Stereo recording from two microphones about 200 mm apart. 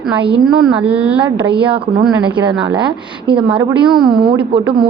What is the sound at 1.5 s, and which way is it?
Speech, 25° right (ahead or behind).